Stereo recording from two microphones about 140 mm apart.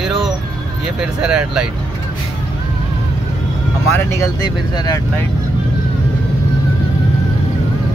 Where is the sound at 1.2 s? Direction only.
5° right (ahead or behind).